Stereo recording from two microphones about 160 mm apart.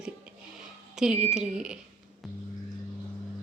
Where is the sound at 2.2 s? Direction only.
Centre (ahead or behind).